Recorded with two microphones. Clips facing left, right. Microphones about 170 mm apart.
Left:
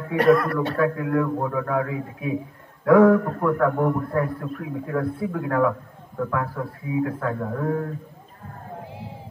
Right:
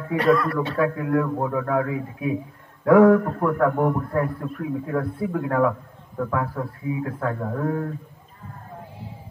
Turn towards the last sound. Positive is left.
turn(degrees=0)  # may be behind; listen again after turning